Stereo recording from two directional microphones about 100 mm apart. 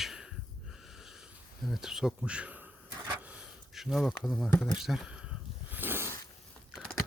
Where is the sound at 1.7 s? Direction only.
5° right (ahead or behind).